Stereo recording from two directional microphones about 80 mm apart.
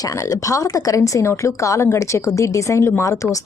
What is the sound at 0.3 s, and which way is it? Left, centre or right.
A woman's voice, left.